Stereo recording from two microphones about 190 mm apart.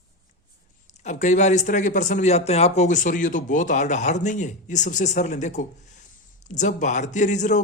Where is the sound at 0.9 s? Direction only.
40° left (ahead or behind).